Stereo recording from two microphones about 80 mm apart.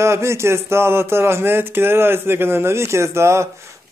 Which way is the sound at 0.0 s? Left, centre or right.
Right.